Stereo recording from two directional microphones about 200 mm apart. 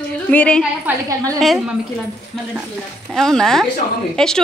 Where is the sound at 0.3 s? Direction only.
5° left (ahead or behind).